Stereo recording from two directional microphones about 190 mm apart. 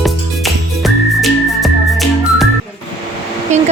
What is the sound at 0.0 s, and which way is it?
Whistling, centre (ahead or behind).